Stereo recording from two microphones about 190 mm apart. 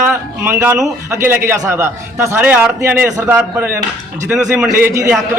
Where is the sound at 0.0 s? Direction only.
10° right (ahead or behind).